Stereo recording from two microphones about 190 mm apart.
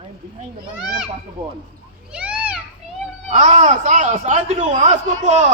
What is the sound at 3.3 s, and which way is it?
A man's voice, 40° right (ahead or behind).